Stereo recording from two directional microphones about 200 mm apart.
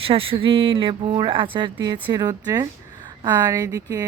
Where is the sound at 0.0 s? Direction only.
30° right (ahead or behind).